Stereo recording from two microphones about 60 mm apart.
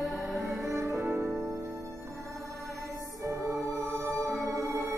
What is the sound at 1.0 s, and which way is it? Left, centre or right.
Music, right.